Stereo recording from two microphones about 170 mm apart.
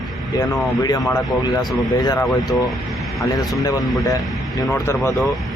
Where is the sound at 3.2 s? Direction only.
20° left (ahead or behind).